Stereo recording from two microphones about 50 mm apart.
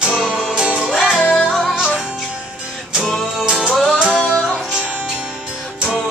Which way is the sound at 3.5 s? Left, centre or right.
Centre.